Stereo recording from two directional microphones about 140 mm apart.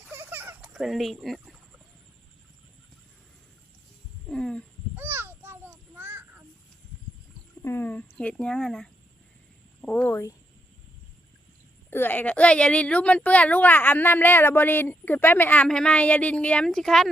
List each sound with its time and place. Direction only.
0.1 s a sound: 15° right (ahead or behind)
0.7 s speech: centre (ahead or behind)
4.3 s wild animals: 5° left (ahead or behind)
4.9 s a sound: 15° right (ahead or behind)
7.6 s a woman's voice: 15° left (ahead or behind)
11.9 s a woman's voice: 15° left (ahead or behind)